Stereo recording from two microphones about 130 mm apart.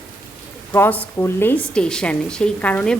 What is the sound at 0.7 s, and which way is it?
A woman's voice, 15° left (ahead or behind).